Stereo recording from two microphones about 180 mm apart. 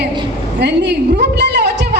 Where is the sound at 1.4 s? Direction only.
70° right (ahead or behind).